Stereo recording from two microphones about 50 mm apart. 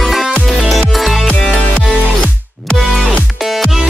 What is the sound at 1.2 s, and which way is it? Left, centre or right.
Music, centre.